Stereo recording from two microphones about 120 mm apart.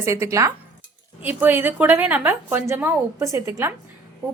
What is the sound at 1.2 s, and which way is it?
A woman's voice, 15° right (ahead or behind).